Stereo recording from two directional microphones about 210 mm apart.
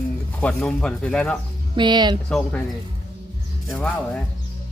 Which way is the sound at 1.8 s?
20° right (ahead or behind).